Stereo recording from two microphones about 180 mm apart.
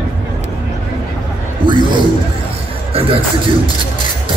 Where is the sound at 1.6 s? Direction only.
25° right (ahead or behind).